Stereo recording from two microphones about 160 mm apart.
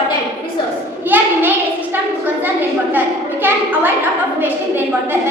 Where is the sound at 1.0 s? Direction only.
10° right (ahead or behind).